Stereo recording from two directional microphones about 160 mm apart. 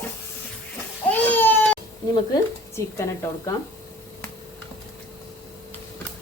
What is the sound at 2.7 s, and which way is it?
Speech, 20° left (ahead or behind).